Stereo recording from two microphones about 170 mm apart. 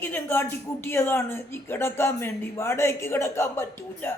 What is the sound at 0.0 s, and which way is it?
Speech, 10° left (ahead or behind).